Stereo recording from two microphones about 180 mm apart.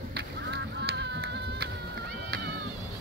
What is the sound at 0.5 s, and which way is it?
Goose, 75° right (ahead or behind).